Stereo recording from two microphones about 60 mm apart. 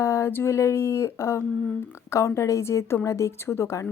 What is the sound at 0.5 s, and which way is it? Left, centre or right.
A woman's voice, left.